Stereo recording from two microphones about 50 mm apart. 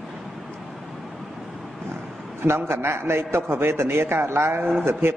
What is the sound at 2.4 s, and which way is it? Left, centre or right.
A man's voice, right.